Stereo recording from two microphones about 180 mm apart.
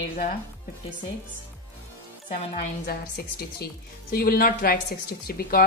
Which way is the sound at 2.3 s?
55° left (ahead or behind).